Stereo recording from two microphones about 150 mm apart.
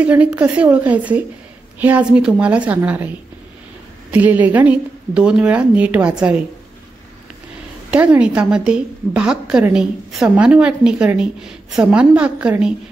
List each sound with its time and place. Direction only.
0.0 s a woman's voice: 10° right (ahead or behind)
7.9 s a woman's voice: 10° right (ahead or behind)